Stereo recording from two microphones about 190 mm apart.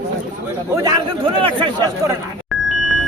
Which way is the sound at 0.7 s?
15° right (ahead or behind).